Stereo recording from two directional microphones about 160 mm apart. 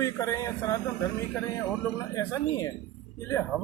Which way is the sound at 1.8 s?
15° left (ahead or behind).